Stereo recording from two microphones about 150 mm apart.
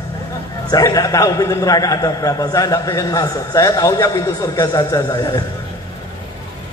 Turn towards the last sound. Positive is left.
turn(degrees=25)  # may be behind; listen again after turning